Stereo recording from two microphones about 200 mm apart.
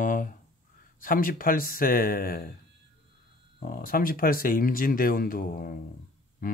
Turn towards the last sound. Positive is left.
turn(degrees=45)  # may be behind; listen again after turning